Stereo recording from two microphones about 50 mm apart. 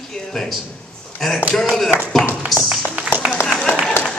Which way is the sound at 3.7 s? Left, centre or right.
Left.